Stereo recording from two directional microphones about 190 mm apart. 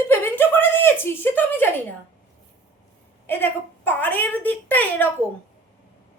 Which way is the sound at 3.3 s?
10° left (ahead or behind).